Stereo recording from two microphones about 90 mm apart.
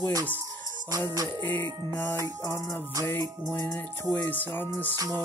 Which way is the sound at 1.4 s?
25° left (ahead or behind).